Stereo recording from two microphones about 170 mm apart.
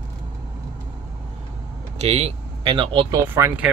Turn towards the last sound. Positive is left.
turn(degrees=-10)  # may be behind; listen again after turning